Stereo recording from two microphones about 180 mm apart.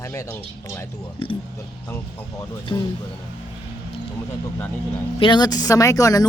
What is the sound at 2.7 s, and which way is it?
Speech, 25° left (ahead or behind).